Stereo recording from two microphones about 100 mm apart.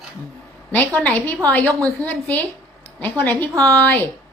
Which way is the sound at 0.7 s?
15° left (ahead or behind).